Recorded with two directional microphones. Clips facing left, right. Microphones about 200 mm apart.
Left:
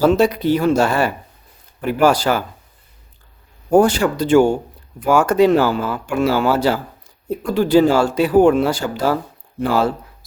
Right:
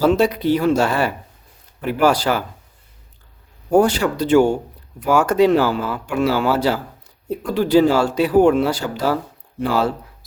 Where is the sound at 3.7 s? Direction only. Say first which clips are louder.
Left 2 dB; 50° left (ahead or behind).